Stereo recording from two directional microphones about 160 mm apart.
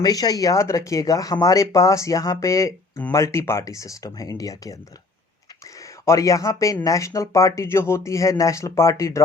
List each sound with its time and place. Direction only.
0.0 s speech: 25° left (ahead or behind)
5.8 s speech: 20° left (ahead or behind)